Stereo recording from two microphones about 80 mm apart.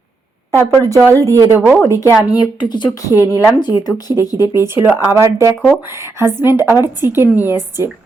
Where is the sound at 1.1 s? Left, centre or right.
Right.